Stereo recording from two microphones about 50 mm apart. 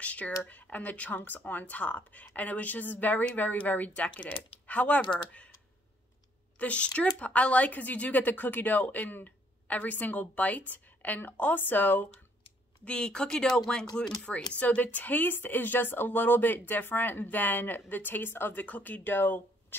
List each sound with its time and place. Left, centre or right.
0.0 s speech: left
6.6 s speech: left
12.8 s speech: centre; by 19.4 s left